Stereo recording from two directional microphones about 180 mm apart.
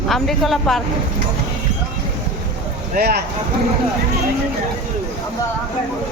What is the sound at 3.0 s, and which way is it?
Speech, 60° right (ahead or behind).